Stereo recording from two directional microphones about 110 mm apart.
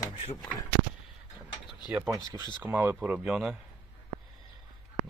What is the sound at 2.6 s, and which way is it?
Speech, 20° right (ahead or behind).